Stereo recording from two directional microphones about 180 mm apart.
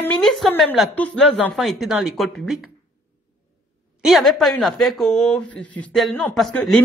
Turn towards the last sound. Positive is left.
turn(degrees=0)  # may be behind; listen again after turning